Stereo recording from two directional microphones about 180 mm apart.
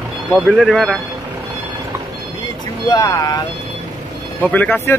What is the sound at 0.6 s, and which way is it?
Speech, centre (ahead or behind).